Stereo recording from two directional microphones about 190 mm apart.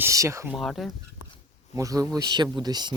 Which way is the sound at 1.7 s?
15° right (ahead or behind).